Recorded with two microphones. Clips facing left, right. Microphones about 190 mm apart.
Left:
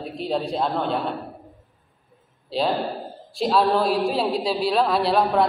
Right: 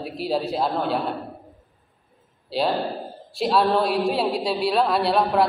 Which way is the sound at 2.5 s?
Centre (ahead or behind).